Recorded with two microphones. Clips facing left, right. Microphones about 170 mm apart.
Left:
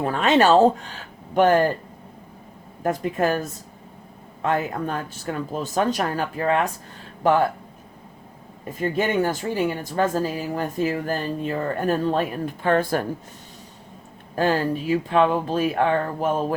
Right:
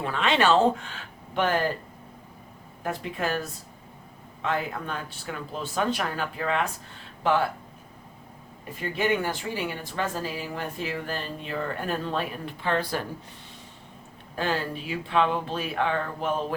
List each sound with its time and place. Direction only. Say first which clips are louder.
0.0 s speech: left 6 dB; 45° left (ahead or behind)
2.8 s speech: left 8 dB; 45° left (ahead or behind)
4.4 s speech: left 5 dB; 45° left (ahead or behind)
8.8 s speech: left 5 dB; 45° left (ahead or behind)
14.3 s speech: left 7 dB; 45° left (ahead or behind)